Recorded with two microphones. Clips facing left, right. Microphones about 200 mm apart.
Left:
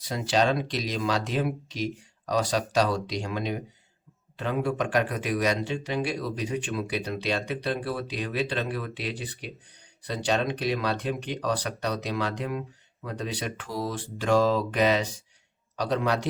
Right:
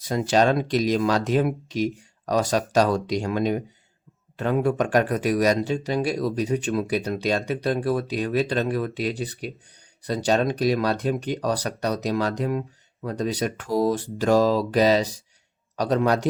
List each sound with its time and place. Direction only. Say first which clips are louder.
0.0 s speech: right 5 dB; 50° right (ahead or behind)